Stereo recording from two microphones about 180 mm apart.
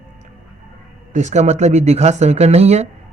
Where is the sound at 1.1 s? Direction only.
40° right (ahead or behind).